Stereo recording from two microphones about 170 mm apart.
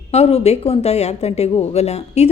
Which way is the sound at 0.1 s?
40° left (ahead or behind).